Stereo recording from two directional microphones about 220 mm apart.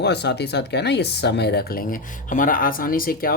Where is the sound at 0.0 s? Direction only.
50° left (ahead or behind).